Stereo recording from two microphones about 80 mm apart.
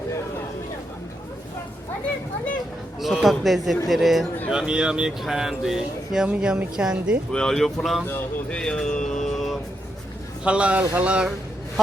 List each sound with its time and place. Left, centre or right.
3.0 s speech: centre
7.3 s speech: centre
8.4 s a sound: centre
10.4 s speech: centre